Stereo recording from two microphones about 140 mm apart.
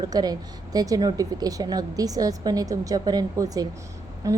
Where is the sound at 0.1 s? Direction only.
30° right (ahead or behind).